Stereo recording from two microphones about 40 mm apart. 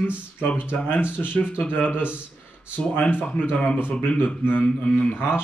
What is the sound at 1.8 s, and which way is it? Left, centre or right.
Speech, right.